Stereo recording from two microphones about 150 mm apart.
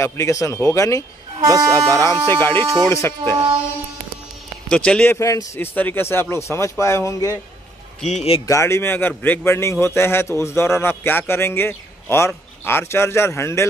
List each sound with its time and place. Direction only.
0.0 s speech: 20° left (ahead or behind)
1.4 s speech: 25° right (ahead or behind)
2.0 s a man's voice: 20° left (ahead or behind)
4.6 s a man's voice: 5° left (ahead or behind)
8.5 s a man's voice: 20° left (ahead or behind)